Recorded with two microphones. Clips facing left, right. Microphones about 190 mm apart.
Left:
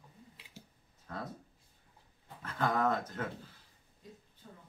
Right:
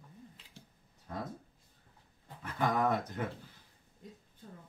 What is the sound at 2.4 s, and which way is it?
Speech, 15° right (ahead or behind).